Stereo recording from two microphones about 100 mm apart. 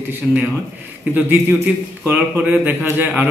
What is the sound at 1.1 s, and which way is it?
A man's voice, 15° right (ahead or behind).